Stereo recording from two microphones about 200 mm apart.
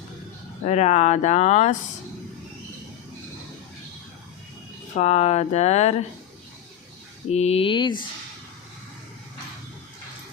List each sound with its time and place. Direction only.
0.6 s speech: 35° left (ahead or behind)
4.9 s speech: 35° left (ahead or behind)
7.3 s speech: 30° left (ahead or behind)